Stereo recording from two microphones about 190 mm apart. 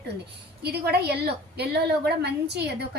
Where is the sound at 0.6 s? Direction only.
55° right (ahead or behind).